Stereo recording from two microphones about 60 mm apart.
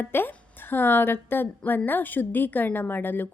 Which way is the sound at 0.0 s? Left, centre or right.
Left.